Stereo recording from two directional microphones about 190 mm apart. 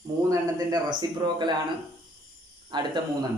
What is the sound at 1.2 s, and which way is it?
Speech, 25° right (ahead or behind).